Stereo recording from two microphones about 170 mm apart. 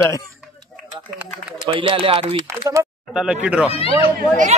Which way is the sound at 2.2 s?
15° right (ahead or behind).